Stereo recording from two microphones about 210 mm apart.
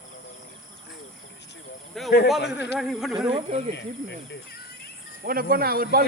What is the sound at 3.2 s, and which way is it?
Speech, 25° right (ahead or behind).